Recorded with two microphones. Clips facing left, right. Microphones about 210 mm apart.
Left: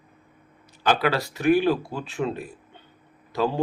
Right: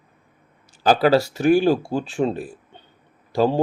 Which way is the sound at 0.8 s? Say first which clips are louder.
Right 7 dB; 35° right (ahead or behind).